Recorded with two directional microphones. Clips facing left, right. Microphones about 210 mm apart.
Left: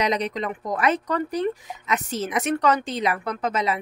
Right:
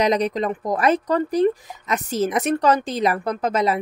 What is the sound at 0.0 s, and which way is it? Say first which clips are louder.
Speech: right 5 dB; 40° right (ahead or behind).